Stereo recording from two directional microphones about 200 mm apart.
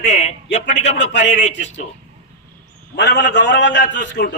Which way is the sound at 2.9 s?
60° left (ahead or behind).